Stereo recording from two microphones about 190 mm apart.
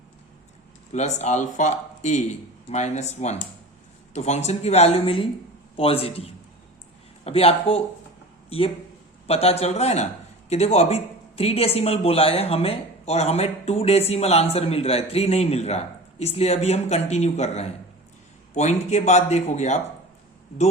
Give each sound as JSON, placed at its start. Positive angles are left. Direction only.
{"t": 0.9, "sound": "speech", "side_deg": 35}